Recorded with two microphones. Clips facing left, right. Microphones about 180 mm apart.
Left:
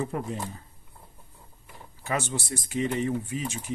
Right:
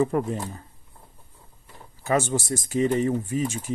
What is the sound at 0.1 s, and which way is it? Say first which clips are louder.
Speech: right 7 dB; 50° right (ahead or behind).